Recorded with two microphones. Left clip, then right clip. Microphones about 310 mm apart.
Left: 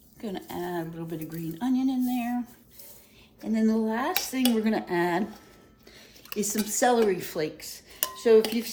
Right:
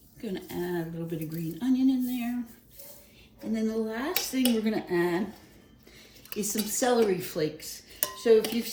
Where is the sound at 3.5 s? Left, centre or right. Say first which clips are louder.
Left 4 dB; left.